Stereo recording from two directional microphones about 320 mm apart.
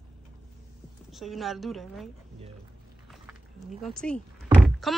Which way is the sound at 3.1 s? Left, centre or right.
Centre.